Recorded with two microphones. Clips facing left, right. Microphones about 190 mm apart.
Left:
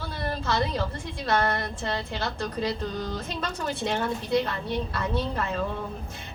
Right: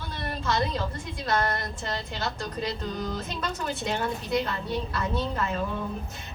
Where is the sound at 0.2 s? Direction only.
30° left (ahead or behind).